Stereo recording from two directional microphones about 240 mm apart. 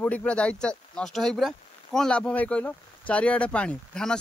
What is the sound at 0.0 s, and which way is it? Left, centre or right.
Speech, centre.